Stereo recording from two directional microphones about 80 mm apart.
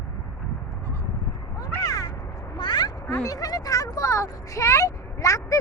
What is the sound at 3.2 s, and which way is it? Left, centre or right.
Speech, left.